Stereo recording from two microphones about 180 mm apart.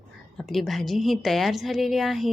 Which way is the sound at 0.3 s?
Centre (ahead or behind).